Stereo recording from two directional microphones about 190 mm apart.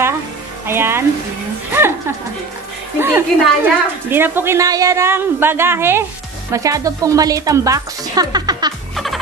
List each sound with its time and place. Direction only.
0.7 s music: 10° right (ahead or behind)
1.7 s a sound: 15° right (ahead or behind)
3.0 s a woman's voice: 10° right (ahead or behind)
8.9 s music: centre (ahead or behind)